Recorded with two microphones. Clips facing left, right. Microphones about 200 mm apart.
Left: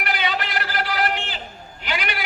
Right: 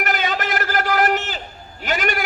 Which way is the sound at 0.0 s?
45° right (ahead or behind).